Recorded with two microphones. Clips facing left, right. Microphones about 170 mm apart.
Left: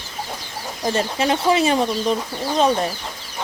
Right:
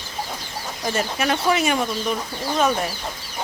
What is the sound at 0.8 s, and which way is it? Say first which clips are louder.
Speech: left 3 dB; 30° left (ahead or behind).